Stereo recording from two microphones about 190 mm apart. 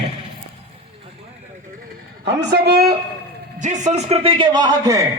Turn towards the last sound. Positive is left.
turn(degrees=-20)  # may be behind; listen again after turning